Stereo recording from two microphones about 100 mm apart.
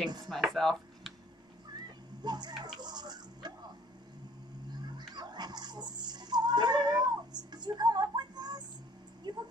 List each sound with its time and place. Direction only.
0.3 s speech: centre (ahead or behind)
2.2 s a child's voice: 45° right (ahead or behind)
2.8 s music: 45° right (ahead or behind)
4.6 s music: 45° right (ahead or behind)
9.3 s a sound: 45° right (ahead or behind)